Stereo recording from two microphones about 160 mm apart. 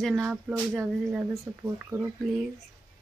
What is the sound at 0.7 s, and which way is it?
Speech, 15° right (ahead or behind).